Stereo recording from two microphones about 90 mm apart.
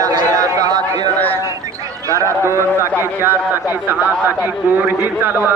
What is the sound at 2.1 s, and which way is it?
Speech, 35° right (ahead or behind).